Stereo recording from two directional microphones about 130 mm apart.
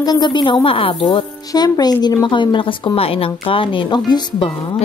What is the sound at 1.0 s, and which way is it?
A woman's voice, 30° left (ahead or behind).